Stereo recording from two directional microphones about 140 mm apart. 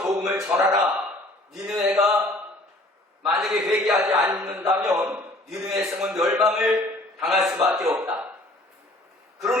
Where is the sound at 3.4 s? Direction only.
5° right (ahead or behind).